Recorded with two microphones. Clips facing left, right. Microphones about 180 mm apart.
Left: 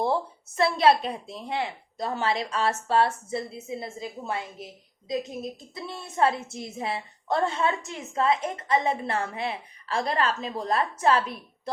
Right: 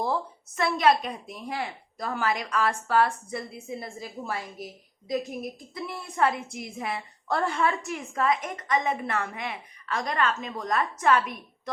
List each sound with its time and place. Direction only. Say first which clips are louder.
0.0 s a woman's voice: left 3 dB; 30° left (ahead or behind)